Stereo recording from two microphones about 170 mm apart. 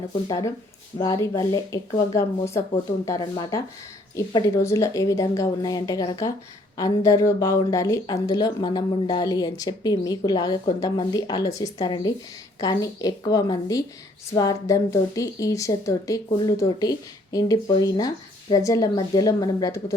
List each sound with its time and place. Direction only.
0.3 s speech: 20° left (ahead or behind)